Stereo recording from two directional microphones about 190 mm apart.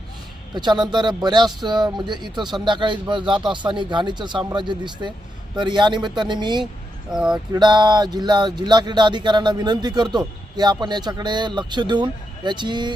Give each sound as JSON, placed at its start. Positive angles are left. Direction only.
{"t": 0.5, "sound": "speech", "side_deg": -25}
{"t": 7.1, "sound": "speech", "side_deg": -5}
{"t": 7.5, "sound": "speech", "side_deg": -25}